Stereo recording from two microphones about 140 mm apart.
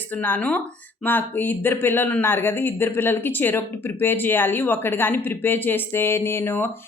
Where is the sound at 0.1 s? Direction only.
15° left (ahead or behind).